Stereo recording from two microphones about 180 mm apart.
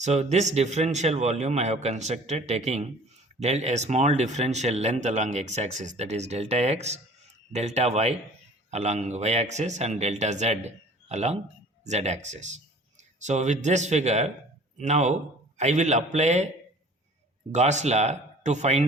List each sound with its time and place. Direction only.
0.0 s a man's voice: 40° right (ahead or behind)
17.5 s a man's voice: 40° right (ahead or behind)